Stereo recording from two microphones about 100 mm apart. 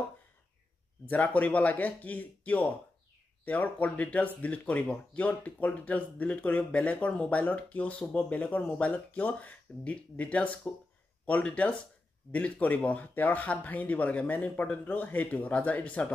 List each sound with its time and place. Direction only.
1.0 s speech: 15° left (ahead or behind)